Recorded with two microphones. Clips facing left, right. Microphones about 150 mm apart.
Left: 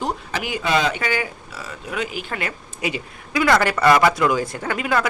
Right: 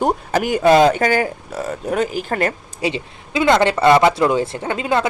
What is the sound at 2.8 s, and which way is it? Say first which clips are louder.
Speech: right 4 dB; 25° right (ahead or behind).